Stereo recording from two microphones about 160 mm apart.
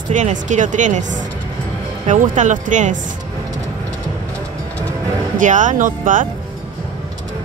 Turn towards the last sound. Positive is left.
turn(degrees=-55)  # may be behind; listen again after turning